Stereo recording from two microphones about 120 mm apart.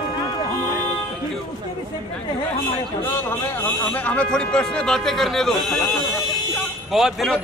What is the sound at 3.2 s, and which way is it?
A man's voice, 20° left (ahead or behind).